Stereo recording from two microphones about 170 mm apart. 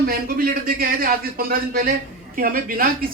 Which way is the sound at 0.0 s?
60° right (ahead or behind).